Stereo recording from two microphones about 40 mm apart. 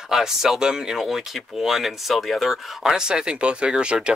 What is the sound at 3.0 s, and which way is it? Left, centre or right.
Speech, right.